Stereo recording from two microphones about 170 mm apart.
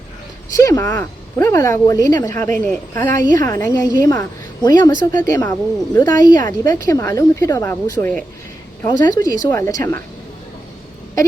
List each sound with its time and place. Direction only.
0.5 s speech: 20° left (ahead or behind)